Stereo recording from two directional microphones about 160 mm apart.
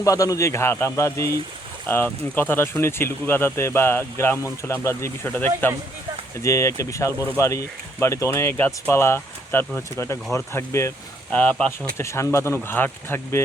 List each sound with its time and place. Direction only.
0.0 s speech: 20° left (ahead or behind)
11.9 s speech: 15° left (ahead or behind)